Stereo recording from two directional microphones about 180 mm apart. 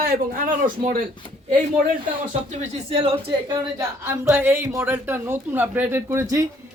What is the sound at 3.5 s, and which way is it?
Speech, 15° right (ahead or behind).